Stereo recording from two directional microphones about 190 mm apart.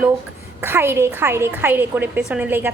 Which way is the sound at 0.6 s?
10° right (ahead or behind).